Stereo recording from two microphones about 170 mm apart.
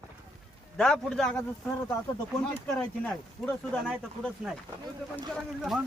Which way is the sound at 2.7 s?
5° left (ahead or behind).